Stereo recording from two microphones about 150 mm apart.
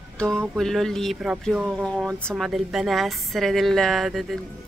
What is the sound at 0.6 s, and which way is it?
Speech, centre (ahead or behind).